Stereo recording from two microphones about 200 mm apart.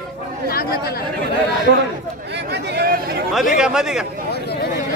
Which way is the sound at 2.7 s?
50° right (ahead or behind).